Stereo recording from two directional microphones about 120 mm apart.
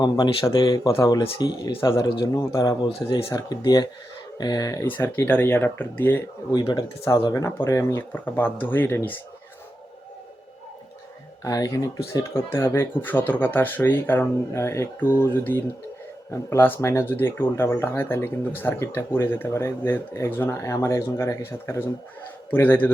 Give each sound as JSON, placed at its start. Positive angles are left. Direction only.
{"t": 0.0, "sound": "speech", "side_deg": 35}
{"t": 1.2, "sound": "speech", "side_deg": 45}
{"t": 2.8, "sound": "speech", "side_deg": 40}
{"t": 4.9, "sound": "speech", "side_deg": 15}
{"t": 6.5, "sound": "speech", "side_deg": 35}
{"t": 11.4, "sound": "speech", "side_deg": 30}